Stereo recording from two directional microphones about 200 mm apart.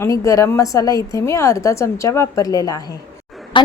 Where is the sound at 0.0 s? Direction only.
15° left (ahead or behind).